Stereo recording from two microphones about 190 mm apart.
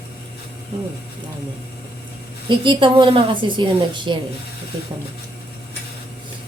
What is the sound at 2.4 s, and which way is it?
Speech, 25° right (ahead or behind).